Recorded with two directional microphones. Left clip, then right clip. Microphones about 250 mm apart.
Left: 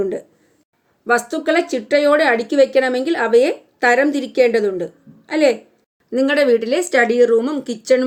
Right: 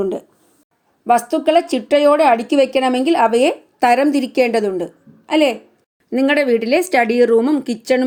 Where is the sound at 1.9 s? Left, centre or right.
Right.